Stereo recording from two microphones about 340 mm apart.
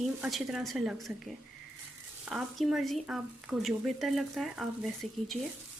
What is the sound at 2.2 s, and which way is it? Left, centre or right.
Speech, centre.